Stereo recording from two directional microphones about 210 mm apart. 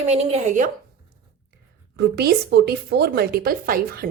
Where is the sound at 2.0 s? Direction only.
50° right (ahead or behind).